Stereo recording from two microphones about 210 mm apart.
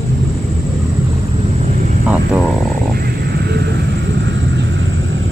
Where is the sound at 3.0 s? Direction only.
50° right (ahead or behind).